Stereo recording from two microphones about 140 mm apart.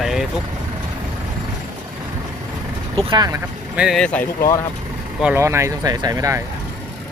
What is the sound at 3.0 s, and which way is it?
Speech, 30° right (ahead or behind).